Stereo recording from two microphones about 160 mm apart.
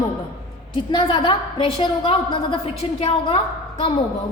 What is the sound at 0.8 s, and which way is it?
A woman's voice, 30° left (ahead or behind).